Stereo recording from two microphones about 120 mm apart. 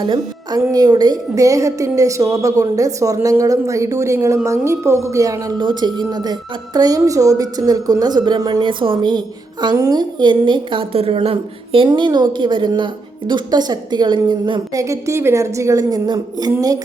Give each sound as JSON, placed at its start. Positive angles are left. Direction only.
{"t": 0.0, "sound": "a woman's voice", "side_deg": -35}
{"t": 5.5, "sound": "a woman's voice", "side_deg": -40}
{"t": 11.9, "sound": "a woman's voice", "side_deg": -40}
{"t": 14.7, "sound": "a woman's voice", "side_deg": -25}